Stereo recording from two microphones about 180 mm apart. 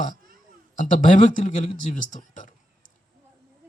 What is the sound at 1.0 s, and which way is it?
Speech, 45° left (ahead or behind).